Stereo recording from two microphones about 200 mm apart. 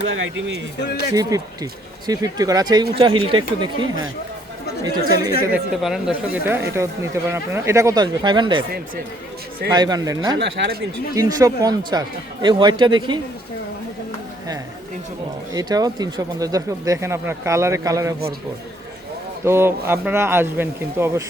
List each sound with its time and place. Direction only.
0.1 s speech: 65° right (ahead or behind)
1.1 s speech: 15° right (ahead or behind)
5.5 s speech: 5° right (ahead or behind); by 8.6 s 20° right (ahead or behind)
9.7 s speech: 20° right (ahead or behind)
10.3 s speech: 60° right (ahead or behind)
11.1 s speech: 15° right (ahead or behind)
15.5 s speech: 20° right (ahead or behind)
19.5 s speech: 10° right (ahead or behind)